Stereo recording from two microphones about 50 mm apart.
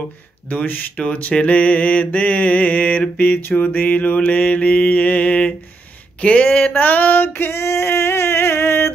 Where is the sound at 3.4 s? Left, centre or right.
Left.